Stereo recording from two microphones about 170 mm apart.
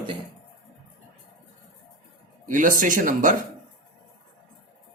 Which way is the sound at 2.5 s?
50° right (ahead or behind).